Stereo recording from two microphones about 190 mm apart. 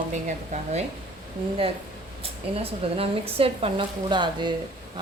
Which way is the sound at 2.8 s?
30° right (ahead or behind).